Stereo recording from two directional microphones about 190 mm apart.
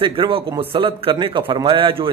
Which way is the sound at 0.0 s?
25° right (ahead or behind).